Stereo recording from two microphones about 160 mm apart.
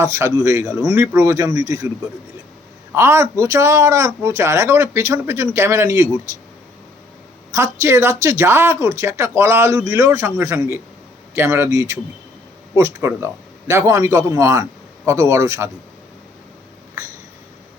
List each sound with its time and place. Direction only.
0.0 s speech: 20° right (ahead or behind)
2.9 s speech: 15° right (ahead or behind)
7.5 s speech: 15° right (ahead or behind)